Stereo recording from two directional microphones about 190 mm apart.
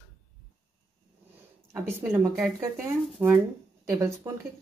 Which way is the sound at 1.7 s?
15° right (ahead or behind).